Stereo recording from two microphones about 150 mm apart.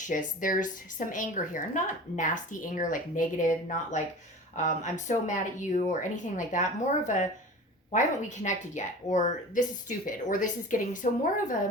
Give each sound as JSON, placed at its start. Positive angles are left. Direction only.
{"t": 0.1, "sound": "a woman's voice", "side_deg": 60}